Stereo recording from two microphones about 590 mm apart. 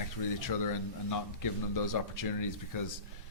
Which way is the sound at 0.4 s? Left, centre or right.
Left.